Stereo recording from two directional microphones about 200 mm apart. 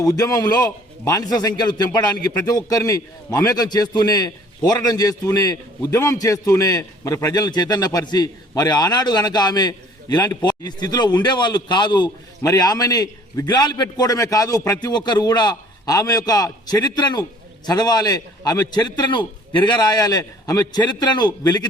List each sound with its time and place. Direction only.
0.0 s a man's voice: 20° left (ahead or behind)